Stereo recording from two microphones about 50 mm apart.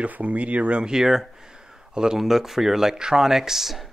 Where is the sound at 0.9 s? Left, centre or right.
Centre.